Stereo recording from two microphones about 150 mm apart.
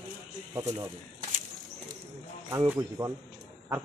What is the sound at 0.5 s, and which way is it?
Speech, 20° right (ahead or behind).